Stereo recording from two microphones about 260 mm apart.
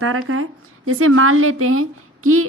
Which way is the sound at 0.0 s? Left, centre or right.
Right.